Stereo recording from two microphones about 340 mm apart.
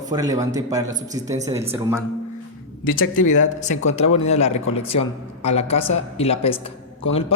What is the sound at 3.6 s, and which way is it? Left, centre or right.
A man's voice, left.